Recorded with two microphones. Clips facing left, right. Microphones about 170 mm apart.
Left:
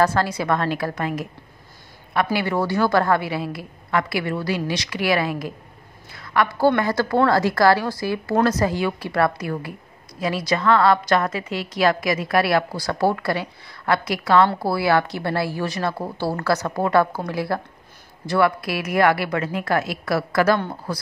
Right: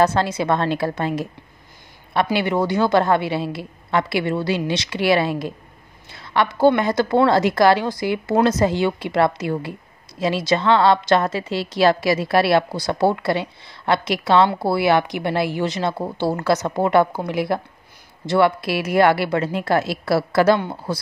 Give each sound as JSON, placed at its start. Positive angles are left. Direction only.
{"t": 0.0, "sound": "a woman's voice", "side_deg": -20}
{"t": 2.3, "sound": "a woman's voice", "side_deg": -20}